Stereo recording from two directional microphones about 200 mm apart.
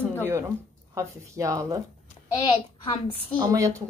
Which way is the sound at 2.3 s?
25° left (ahead or behind).